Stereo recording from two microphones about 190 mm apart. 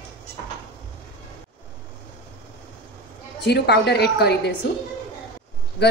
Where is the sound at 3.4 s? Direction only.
60° left (ahead or behind).